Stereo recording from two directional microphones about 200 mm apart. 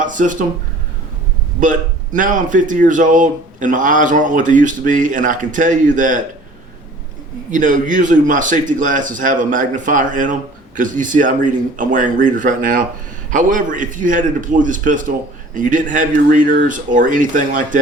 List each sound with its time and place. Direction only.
0.0 s speech: 40° right (ahead or behind)
1.6 s speech: 40° right (ahead or behind)
7.5 s speech: 40° right (ahead or behind)